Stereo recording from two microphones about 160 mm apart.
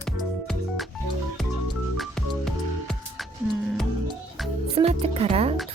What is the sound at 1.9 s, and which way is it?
Music, centre (ahead or behind).